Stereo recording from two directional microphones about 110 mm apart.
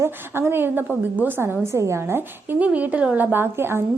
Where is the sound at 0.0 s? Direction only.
20° right (ahead or behind).